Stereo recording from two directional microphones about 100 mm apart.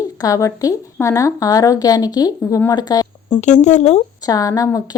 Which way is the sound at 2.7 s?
40° left (ahead or behind).